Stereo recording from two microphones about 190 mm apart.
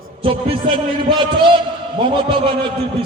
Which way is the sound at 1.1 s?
25° right (ahead or behind).